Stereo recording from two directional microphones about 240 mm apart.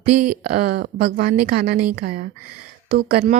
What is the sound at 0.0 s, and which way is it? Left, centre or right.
Speech, right.